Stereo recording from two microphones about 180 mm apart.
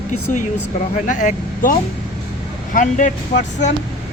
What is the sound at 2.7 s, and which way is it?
Speech, 45° left (ahead or behind).